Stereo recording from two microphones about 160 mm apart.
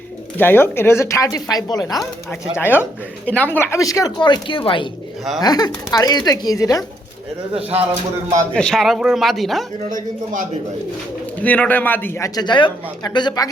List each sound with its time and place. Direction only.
0.3 s speech: 10° left (ahead or behind)
2.6 s speech: 15° left (ahead or behind)
8.5 s speech: 5° left (ahead or behind)
9.9 s a man's voice: 55° right (ahead or behind)
11.3 s speech: 10° left (ahead or behind); by 13.5 s 25° left (ahead or behind)